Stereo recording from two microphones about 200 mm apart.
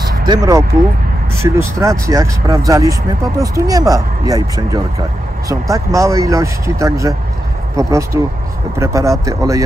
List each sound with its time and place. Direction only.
0.3 s speech: 20° right (ahead or behind)